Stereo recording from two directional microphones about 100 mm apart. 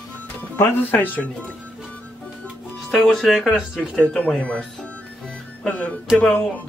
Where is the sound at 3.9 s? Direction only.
10° left (ahead or behind).